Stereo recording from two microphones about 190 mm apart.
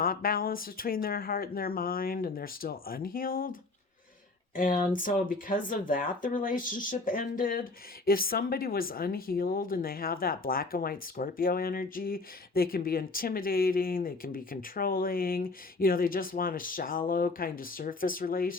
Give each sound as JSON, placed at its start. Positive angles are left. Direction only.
{"t": 0.0, "sound": "speech", "side_deg": 50}